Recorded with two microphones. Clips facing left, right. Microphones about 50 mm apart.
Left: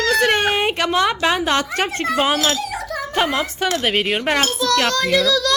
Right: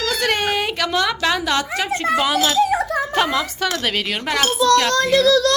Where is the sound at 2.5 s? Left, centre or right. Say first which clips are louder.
Right 8 dB; right.